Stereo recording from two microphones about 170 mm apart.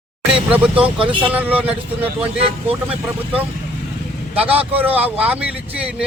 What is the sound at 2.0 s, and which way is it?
Speech, 35° right (ahead or behind).